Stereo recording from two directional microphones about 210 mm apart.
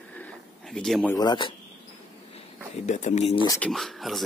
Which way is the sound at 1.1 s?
20° left (ahead or behind).